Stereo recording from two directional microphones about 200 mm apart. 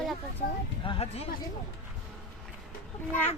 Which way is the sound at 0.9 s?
30° left (ahead or behind).